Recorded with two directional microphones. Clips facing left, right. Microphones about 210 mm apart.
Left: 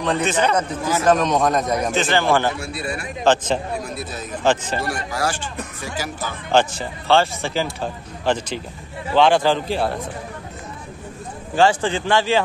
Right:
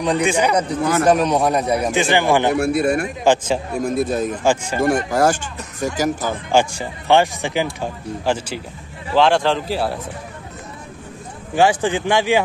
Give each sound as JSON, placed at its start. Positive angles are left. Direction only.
{"t": 0.0, "sound": "a man's voice", "side_deg": -10}
{"t": 2.5, "sound": "a man's voice", "side_deg": -55}
{"t": 4.4, "sound": "a man's voice", "side_deg": -10}
{"t": 4.8, "sound": "a man's voice", "side_deg": -50}
{"t": 6.5, "sound": "a man's voice", "side_deg": -10}
{"t": 11.5, "sound": "a man's voice", "side_deg": -15}